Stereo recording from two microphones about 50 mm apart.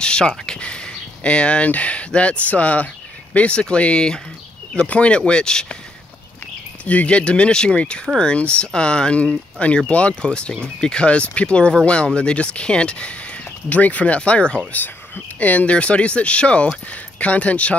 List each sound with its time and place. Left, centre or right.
0.0 s speech: centre
6.8 s speech: left